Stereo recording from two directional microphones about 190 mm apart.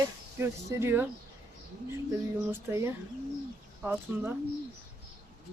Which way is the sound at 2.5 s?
15° right (ahead or behind).